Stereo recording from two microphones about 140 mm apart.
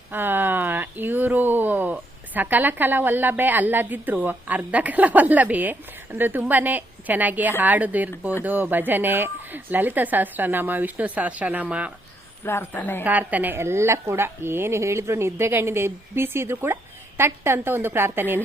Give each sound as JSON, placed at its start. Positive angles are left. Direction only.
{"t": 0.1, "sound": "a woman's voice", "side_deg": -15}
{"t": 12.5, "sound": "a woman's voice", "side_deg": 15}
{"t": 13.1, "sound": "a woman's voice", "side_deg": -10}